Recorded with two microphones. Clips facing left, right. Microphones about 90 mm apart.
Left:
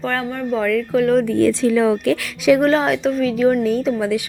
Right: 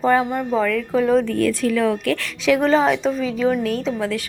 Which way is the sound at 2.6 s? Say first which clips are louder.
Even; centre (ahead or behind).